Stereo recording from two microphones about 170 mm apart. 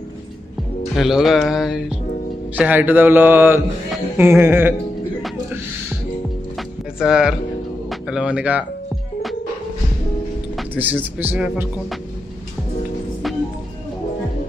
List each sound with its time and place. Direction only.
0.9 s speech: centre (ahead or behind)
7.0 s speech: 5° right (ahead or behind)
10.7 s speech: 10° right (ahead or behind)